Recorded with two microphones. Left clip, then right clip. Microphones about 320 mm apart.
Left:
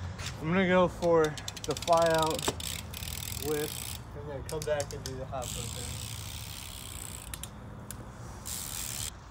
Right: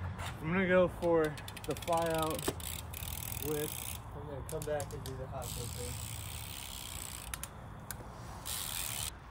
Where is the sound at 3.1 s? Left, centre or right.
Left.